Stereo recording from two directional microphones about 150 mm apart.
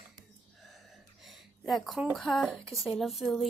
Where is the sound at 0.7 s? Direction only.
Centre (ahead or behind).